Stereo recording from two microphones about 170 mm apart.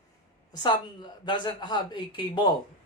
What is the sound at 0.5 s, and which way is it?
Speech, 25° left (ahead or behind).